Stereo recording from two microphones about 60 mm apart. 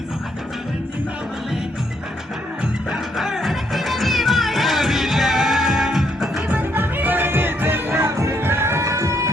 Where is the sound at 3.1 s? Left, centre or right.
Centre.